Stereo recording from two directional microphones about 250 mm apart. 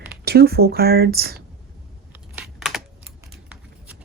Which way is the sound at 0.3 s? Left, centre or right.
Right.